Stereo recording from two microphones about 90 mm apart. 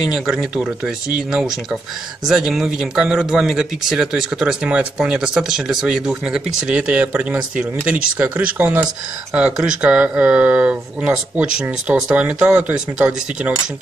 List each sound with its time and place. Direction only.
0.1 s speech: 5° right (ahead or behind)